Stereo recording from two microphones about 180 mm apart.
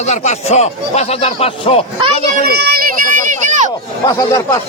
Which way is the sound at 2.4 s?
60° right (ahead or behind).